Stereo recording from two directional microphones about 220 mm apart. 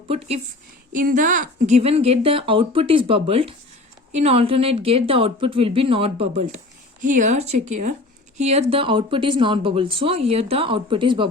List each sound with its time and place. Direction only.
0.1 s a woman's voice: 30° right (ahead or behind)